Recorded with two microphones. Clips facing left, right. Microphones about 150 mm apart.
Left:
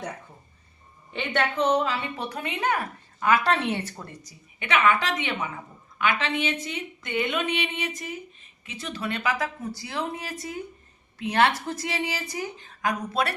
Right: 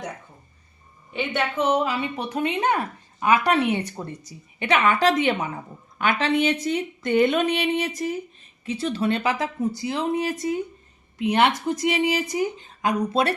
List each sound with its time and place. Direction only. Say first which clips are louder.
1.1 s a woman's voice: right 1 dB; 5° right (ahead or behind); by 13.3 s 25° right (ahead or behind)